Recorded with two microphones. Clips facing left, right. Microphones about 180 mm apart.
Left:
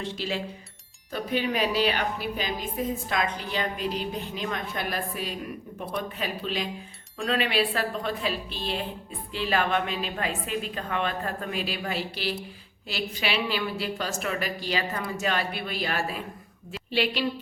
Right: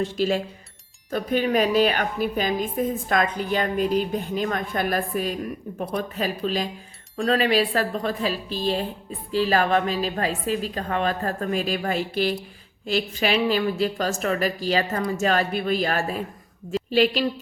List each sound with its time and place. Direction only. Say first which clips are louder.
0.0 s a woman's voice: right 8 dB; 45° right (ahead or behind)